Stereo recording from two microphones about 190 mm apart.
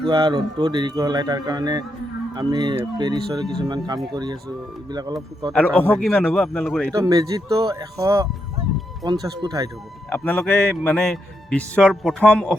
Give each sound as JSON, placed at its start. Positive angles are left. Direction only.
{"t": 0.0, "sound": "speech", "side_deg": -25}
{"t": 5.5, "sound": "a man's voice", "side_deg": 10}
{"t": 6.9, "sound": "speech", "side_deg": -20}
{"t": 10.1, "sound": "a man's voice", "side_deg": 5}